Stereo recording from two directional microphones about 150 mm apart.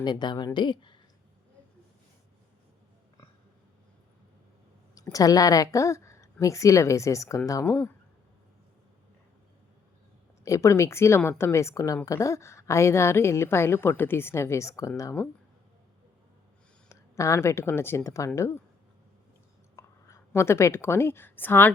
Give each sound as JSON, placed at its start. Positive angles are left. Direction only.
{"t": 0.0, "sound": "a woman's voice", "side_deg": 30}
{"t": 5.1, "sound": "a woman's voice", "side_deg": 25}
{"t": 10.4, "sound": "a woman's voice", "side_deg": 20}
{"t": 16.9, "sound": "a woman's voice", "side_deg": 20}
{"t": 19.7, "sound": "a woman's voice", "side_deg": 20}